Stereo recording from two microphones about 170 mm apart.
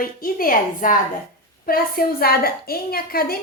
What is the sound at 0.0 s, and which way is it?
A woman's voice, 60° left (ahead or behind).